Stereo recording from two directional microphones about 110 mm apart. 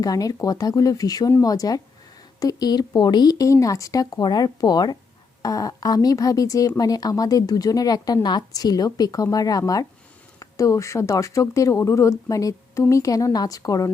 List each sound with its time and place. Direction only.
0.0 s speech: 35° left (ahead or behind)